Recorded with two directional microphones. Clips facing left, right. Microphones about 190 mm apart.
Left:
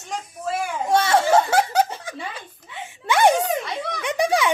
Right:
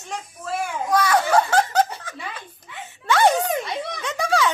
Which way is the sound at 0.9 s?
25° left (ahead or behind).